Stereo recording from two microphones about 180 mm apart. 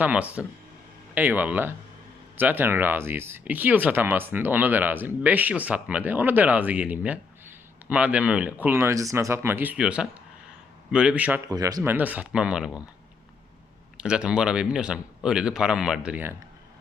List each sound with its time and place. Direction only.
0.0 s speech: 5° right (ahead or behind)
11.4 s speech: 20° right (ahead or behind); by 12.8 s 5° right (ahead or behind)
13.9 s speech: 5° right (ahead or behind)